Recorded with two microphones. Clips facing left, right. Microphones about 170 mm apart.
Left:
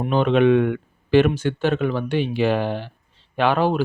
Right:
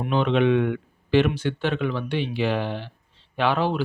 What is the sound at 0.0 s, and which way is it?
Speech, 45° left (ahead or behind).